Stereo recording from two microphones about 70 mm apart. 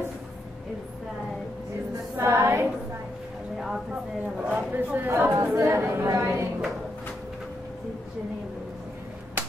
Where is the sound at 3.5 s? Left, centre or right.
Centre.